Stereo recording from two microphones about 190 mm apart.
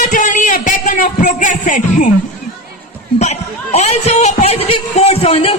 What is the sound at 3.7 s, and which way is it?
A man's voice, 35° left (ahead or behind).